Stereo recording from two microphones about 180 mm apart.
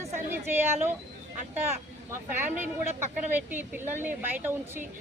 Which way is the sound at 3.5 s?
10° right (ahead or behind).